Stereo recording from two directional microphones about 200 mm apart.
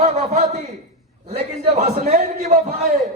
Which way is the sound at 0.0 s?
35° right (ahead or behind).